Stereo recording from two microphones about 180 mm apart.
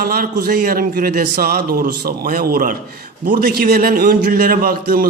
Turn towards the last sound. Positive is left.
turn(degrees=-50)  # may be behind; listen again after turning